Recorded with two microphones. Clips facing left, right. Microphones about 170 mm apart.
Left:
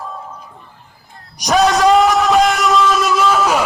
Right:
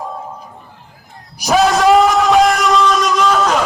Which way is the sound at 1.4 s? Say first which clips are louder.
Even; centre (ahead or behind).